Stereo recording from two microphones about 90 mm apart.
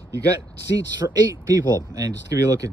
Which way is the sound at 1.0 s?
40° right (ahead or behind).